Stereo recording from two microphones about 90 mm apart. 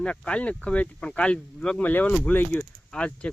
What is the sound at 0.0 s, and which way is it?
Speech, 10° left (ahead or behind).